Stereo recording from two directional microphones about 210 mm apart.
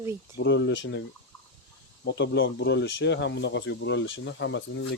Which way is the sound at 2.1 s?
55° left (ahead or behind).